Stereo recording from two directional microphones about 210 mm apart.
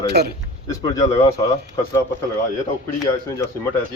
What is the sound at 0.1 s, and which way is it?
Speech, 50° right (ahead or behind).